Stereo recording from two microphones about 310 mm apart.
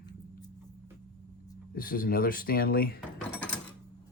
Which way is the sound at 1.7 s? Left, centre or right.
Left.